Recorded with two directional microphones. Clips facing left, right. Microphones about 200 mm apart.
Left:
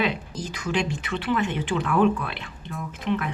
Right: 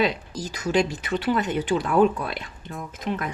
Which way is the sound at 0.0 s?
40° right (ahead or behind).